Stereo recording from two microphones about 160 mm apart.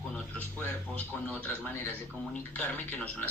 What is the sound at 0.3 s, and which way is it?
Speech, 10° left (ahead or behind).